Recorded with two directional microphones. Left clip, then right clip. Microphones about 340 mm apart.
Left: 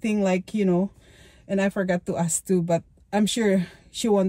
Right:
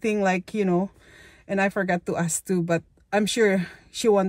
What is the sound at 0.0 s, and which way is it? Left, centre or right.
Speech, centre.